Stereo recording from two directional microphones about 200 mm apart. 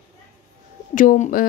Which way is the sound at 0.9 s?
40° left (ahead or behind).